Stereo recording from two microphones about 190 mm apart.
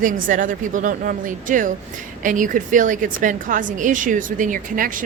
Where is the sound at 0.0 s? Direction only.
45° right (ahead or behind).